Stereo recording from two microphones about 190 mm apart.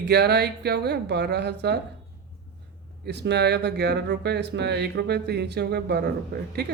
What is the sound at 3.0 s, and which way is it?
Speech, 65° right (ahead or behind).